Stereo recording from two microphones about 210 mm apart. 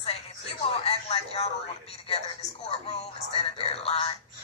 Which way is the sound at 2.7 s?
25° left (ahead or behind).